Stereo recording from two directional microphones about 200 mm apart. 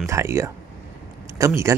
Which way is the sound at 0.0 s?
15° right (ahead or behind).